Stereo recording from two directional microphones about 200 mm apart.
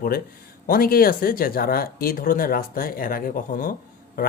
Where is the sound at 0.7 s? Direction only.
45° left (ahead or behind).